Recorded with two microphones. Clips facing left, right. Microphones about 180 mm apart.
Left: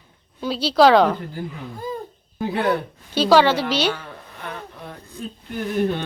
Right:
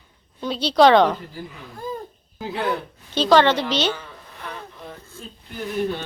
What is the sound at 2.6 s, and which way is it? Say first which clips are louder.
A woman's voice: left 3 dB; 5° left (ahead or behind).